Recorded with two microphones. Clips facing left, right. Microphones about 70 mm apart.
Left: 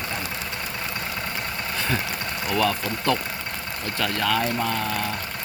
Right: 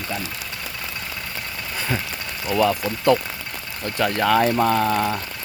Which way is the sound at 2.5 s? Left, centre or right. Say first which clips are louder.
Right 4 dB; centre.